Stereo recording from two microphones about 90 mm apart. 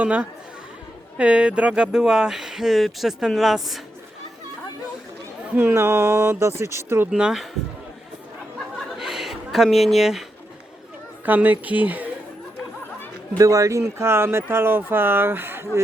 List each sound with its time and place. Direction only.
0.0 s speech: 15° right (ahead or behind)
5.5 s speech: 25° right (ahead or behind)
7.1 s speech: 5° right (ahead or behind)
9.0 s a sound: 5° right (ahead or behind)
11.3 s speech: 20° right (ahead or behind)
13.4 s speech: 40° right (ahead or behind)